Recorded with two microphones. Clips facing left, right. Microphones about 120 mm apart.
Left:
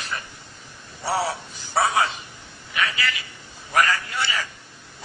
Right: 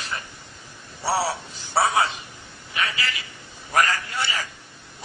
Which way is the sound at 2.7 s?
25° right (ahead or behind).